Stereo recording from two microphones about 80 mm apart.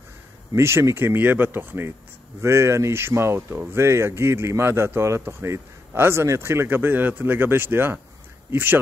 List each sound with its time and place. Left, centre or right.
0.6 s speech: right